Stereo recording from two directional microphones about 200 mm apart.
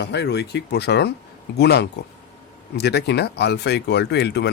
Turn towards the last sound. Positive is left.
turn(degrees=55)  # may be behind; listen again after turning